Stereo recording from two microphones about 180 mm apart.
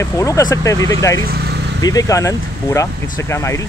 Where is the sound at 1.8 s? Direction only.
20° left (ahead or behind).